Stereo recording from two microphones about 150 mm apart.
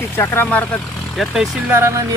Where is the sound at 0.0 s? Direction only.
15° left (ahead or behind).